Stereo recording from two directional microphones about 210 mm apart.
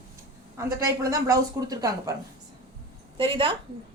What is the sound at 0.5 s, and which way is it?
A woman's voice, 15° right (ahead or behind).